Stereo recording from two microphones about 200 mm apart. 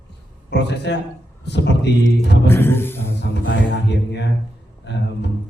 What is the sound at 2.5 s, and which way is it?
Speech, 10° left (ahead or behind).